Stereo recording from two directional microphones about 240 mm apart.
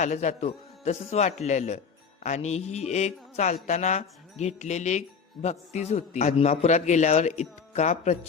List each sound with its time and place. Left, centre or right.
0.0 s a man's voice: left